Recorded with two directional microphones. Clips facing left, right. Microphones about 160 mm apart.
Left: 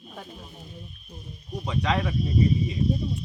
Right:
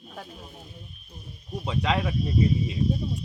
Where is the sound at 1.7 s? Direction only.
5° right (ahead or behind).